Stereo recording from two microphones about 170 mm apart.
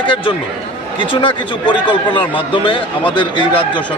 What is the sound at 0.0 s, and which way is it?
Speech, 30° left (ahead or behind).